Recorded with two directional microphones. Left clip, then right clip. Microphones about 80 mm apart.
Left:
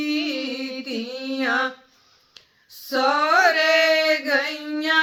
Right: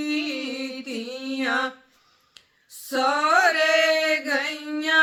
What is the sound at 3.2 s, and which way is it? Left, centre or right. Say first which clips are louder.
Mantra: left 1 dB; centre.